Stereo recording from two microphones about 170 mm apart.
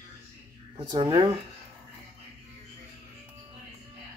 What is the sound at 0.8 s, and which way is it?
Speech, 25° right (ahead or behind).